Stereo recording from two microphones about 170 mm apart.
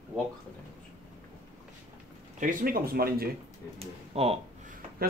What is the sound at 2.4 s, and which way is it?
Speech, 55° right (ahead or behind).